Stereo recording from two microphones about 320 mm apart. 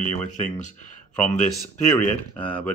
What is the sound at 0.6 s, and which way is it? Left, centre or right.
Speech, left.